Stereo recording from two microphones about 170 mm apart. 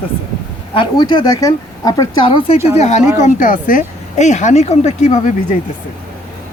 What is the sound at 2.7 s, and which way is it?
Speech, 40° left (ahead or behind).